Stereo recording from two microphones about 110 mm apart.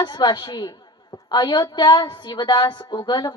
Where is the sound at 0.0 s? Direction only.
45° left (ahead or behind).